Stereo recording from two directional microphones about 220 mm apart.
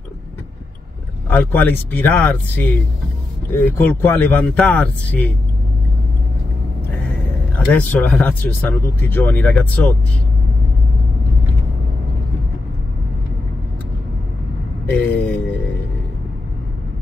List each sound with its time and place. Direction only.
1.3 s speech: 10° left (ahead or behind)
3.7 s speech: 10° left (ahead or behind)
7.5 s speech: 5° left (ahead or behind)
14.9 s speech: 5° left (ahead or behind)